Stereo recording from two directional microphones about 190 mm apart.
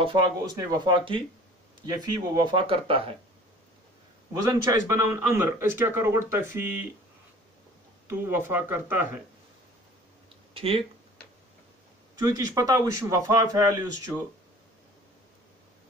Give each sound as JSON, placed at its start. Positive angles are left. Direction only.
{"t": 0.0, "sound": "speech", "side_deg": -25}
{"t": 4.3, "sound": "speech", "side_deg": -20}
{"t": 8.1, "sound": "speech", "side_deg": -10}
{"t": 10.5, "sound": "speech", "side_deg": -30}
{"t": 12.2, "sound": "speech", "side_deg": -20}